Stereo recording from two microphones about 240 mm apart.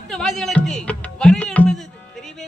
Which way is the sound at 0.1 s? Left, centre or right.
Centre.